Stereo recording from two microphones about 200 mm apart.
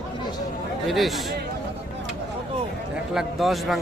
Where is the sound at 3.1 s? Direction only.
Centre (ahead or behind).